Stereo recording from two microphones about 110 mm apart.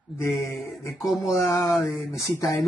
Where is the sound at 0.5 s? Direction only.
Centre (ahead or behind).